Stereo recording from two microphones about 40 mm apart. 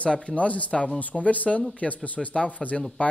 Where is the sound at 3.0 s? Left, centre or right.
Left.